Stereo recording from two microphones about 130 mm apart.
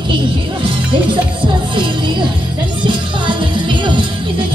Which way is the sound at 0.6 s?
40° right (ahead or behind).